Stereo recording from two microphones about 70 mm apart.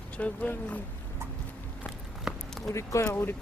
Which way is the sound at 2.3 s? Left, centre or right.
Centre.